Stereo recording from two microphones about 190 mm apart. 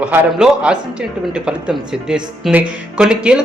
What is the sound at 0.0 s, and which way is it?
A man's voice, 5° right (ahead or behind).